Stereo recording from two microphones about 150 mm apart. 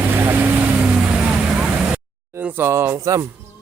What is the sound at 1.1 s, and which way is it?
Vehicle, 5° right (ahead or behind).